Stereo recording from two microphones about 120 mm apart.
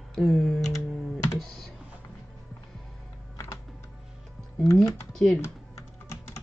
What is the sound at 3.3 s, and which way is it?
Typing, 30° left (ahead or behind).